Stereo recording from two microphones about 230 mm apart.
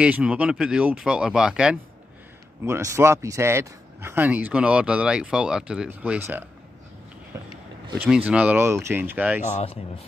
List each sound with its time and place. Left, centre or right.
0.0 s speech: centre
7.3 s a sound: centre
8.3 s speech: centre
9.5 s speech: left